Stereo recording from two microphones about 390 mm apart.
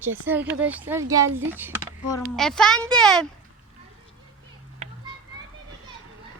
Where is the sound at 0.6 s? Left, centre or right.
Centre.